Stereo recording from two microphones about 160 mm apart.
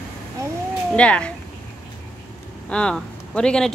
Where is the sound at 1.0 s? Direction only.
5° left (ahead or behind).